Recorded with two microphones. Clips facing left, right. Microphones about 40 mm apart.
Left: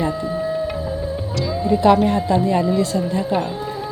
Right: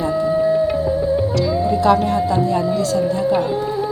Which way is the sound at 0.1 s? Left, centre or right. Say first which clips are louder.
Right 6 dB; centre.